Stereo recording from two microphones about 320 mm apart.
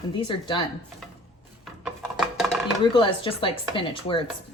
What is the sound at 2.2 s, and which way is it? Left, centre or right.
Chopping, centre.